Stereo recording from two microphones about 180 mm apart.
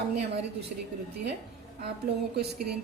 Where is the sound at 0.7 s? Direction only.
50° right (ahead or behind).